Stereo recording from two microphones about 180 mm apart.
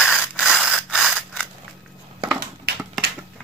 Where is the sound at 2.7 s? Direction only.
65° right (ahead or behind).